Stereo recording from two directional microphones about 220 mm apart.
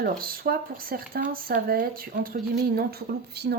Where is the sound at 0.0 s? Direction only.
40° right (ahead or behind).